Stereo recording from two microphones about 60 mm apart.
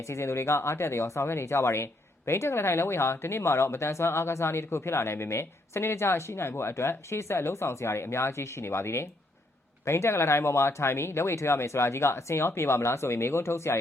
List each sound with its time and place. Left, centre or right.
0.0 s speech: left